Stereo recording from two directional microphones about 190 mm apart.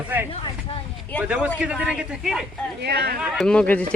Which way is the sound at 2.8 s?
60° right (ahead or behind).